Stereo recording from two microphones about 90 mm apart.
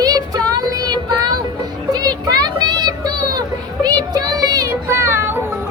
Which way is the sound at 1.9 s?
45° right (ahead or behind).